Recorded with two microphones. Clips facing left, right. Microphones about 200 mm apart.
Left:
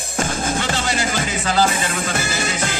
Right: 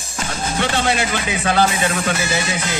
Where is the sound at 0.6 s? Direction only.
60° right (ahead or behind).